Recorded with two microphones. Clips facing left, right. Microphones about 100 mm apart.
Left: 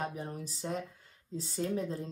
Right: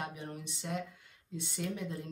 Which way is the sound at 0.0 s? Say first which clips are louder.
Left 4 dB; 35° left (ahead or behind).